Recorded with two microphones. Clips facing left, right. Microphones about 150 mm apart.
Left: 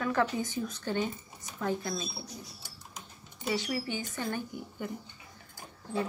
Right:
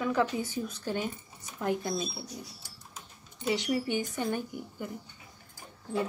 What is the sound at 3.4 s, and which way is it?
Speech, 20° right (ahead or behind).